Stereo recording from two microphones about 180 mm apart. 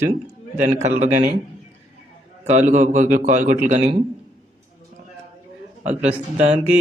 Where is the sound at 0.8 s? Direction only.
40° right (ahead or behind).